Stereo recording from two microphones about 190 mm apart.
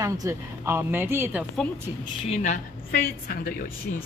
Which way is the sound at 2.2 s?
40° left (ahead or behind).